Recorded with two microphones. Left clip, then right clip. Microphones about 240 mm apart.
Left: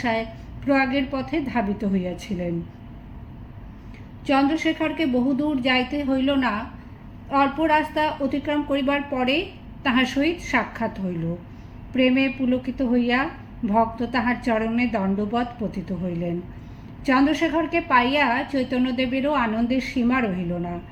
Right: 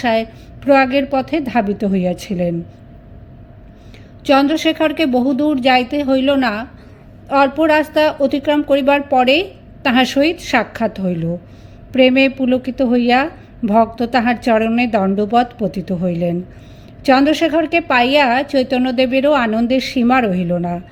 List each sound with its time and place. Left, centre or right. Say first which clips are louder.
0.0 s a woman's voice: right 8 dB; right
4.3 s a woman's voice: right 8 dB; right